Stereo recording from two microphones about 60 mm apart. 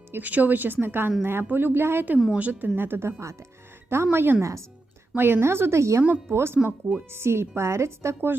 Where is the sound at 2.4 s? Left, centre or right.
Right.